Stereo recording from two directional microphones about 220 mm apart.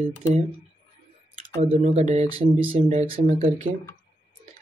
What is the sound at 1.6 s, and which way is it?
Speech, 30° right (ahead or behind).